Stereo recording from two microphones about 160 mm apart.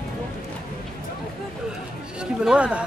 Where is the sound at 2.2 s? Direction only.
5° right (ahead or behind).